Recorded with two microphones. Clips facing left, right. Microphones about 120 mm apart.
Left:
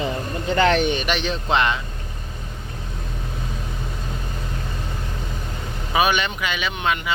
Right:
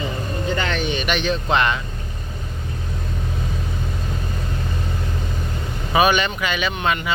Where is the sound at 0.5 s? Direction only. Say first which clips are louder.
Left 10 dB; 70° left (ahead or behind).